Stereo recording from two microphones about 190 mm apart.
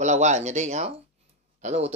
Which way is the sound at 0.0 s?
40° right (ahead or behind).